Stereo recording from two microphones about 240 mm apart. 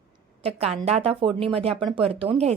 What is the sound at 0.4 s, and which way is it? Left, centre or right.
A woman's voice, right.